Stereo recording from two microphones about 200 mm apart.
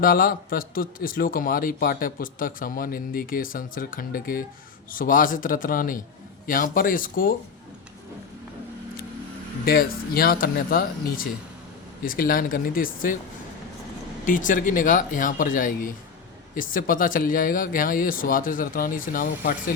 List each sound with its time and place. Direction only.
0.0 s a man's voice: 45° left (ahead or behind)
9.6 s a man's voice: 50° left (ahead or behind)
14.3 s a man's voice: 40° left (ahead or behind)